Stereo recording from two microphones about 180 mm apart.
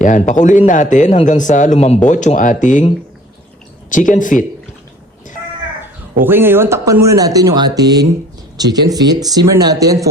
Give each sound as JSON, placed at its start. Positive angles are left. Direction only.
{"t": 0.0, "sound": "speech", "side_deg": 45}
{"t": 5.8, "sound": "speech", "side_deg": -10}